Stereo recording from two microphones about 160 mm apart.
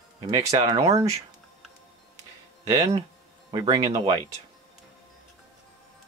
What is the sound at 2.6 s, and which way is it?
Speech, 20° right (ahead or behind).